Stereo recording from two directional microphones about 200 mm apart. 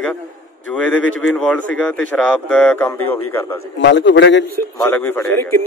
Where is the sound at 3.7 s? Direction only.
65° left (ahead or behind).